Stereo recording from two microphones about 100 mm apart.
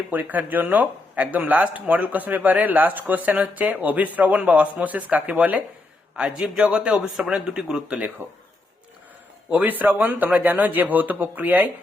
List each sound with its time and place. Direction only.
0.1 s speech: 15° right (ahead or behind)
9.5 s speech: 15° right (ahead or behind)